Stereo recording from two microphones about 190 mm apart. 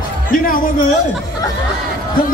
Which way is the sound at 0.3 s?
45° left (ahead or behind).